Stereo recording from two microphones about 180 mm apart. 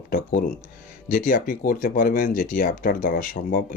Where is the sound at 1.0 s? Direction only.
45° left (ahead or behind).